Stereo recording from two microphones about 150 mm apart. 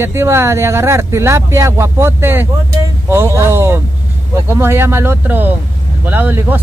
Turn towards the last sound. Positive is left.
turn(degrees=-15)  # may be behind; listen again after turning